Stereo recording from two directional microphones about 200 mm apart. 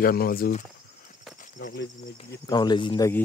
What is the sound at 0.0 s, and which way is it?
Speech, 50° left (ahead or behind).